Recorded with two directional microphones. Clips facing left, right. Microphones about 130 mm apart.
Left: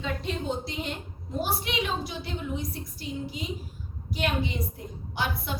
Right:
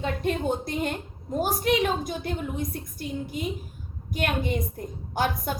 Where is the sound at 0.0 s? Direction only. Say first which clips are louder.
Right 5 dB; 50° right (ahead or behind).